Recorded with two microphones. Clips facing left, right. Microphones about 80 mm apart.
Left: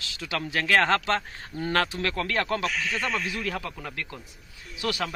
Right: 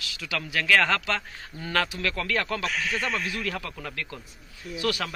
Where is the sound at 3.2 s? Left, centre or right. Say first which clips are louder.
Even; centre.